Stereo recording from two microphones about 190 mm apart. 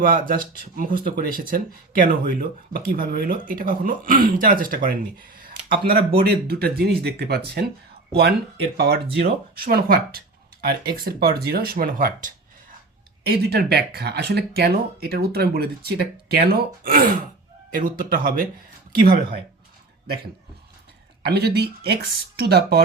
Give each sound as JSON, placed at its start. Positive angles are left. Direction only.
{"t": 0.0, "sound": "speech", "side_deg": -50}
{"t": 5.4, "sound": "a sound", "side_deg": -50}
{"t": 5.7, "sound": "speech", "side_deg": -55}
{"t": 21.2, "sound": "speech", "side_deg": -60}